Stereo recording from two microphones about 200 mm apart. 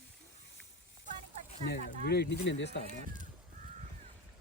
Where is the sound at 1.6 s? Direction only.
55° left (ahead or behind).